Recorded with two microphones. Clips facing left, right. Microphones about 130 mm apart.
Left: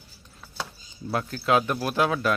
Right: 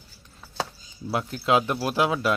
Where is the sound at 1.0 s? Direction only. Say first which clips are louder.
Right 1 dB; 20° right (ahead or behind).